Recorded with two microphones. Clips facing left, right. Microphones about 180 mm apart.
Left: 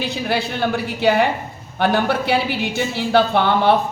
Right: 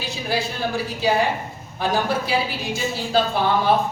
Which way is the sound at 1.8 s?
65° left (ahead or behind).